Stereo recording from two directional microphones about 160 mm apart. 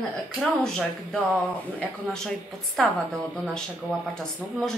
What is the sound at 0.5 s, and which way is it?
Speech, centre (ahead or behind).